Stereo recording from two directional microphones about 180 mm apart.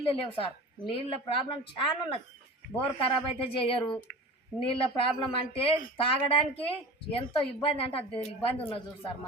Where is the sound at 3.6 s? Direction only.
30° left (ahead or behind).